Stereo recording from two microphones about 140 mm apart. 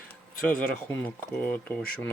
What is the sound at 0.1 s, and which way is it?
Speech, 10° left (ahead or behind).